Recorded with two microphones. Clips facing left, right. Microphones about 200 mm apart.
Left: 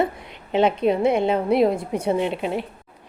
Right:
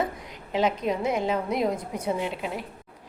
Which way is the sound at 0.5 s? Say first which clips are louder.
Left 6 dB; 65° left (ahead or behind).